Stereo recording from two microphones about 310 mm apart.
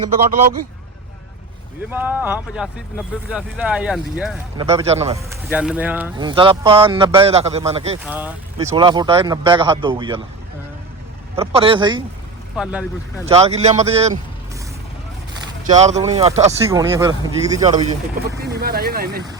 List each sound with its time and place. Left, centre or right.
1.9 s speech: centre
4.5 s speech: centre
5.5 s speech: centre
8.0 s speech: centre
11.3 s speech: centre
12.6 s speech: centre
13.2 s speech: centre
15.7 s speech: right
16.6 s speech: centre
18.4 s speech: right